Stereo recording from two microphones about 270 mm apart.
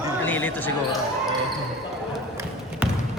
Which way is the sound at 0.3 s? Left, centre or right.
Centre.